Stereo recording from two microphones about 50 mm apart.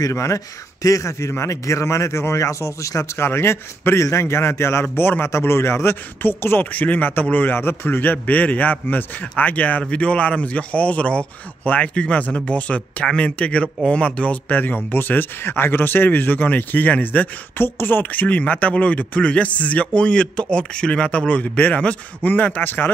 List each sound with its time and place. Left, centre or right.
0.1 s speech: left
0.8 s a man's voice: left
3.3 s a man's voice: left
4.9 s a man's voice: left
5.2 s a man's voice: left
21.3 s a man's voice: left